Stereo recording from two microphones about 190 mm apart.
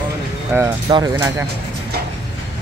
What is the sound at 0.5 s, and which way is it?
Speech, 20° right (ahead or behind).